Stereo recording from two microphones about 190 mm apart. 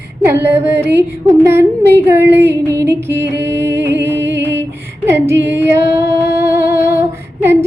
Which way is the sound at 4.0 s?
15° right (ahead or behind).